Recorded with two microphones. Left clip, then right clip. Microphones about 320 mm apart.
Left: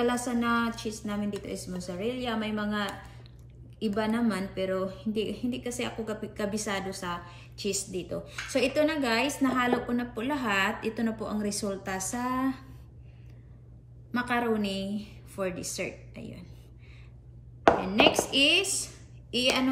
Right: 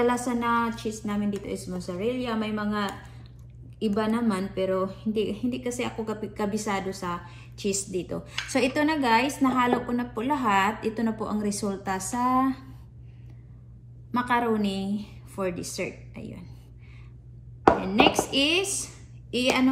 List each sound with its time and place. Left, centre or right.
0.2 s speech: centre
14.1 s speech: centre
17.8 s speech: centre